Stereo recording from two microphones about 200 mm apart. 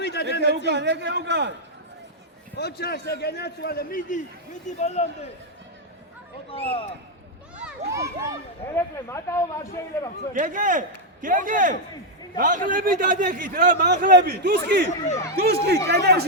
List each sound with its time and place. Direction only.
0.0 s speech: 55° left (ahead or behind)
0.4 s a man's voice: 55° right (ahead or behind)
2.6 s a man's voice: 50° left (ahead or behind)
4.8 s a man's voice: 35° left (ahead or behind)
6.5 s speech: 30° left (ahead or behind)
7.9 s speech: 15° right (ahead or behind)
8.7 s speech: 10° left (ahead or behind)
10.3 s a man's voice: 40° right (ahead or behind)
14.8 s a man's voice: 35° left (ahead or behind)
15.4 s a man's voice: 55° right (ahead or behind)